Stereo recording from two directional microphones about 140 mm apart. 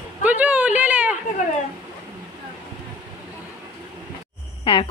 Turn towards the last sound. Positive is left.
turn(degrees=40)  # may be behind; listen again after turning